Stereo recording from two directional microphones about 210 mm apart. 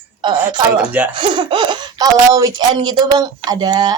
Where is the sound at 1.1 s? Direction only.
20° right (ahead or behind).